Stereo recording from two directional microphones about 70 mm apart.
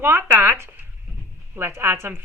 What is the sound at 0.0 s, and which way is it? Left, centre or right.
Speech, right.